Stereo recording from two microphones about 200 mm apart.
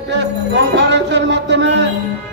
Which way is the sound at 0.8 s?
60° right (ahead or behind).